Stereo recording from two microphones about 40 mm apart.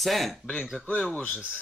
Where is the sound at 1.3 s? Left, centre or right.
Centre.